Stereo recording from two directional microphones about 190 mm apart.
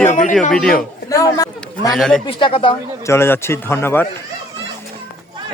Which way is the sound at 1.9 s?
Centre (ahead or behind).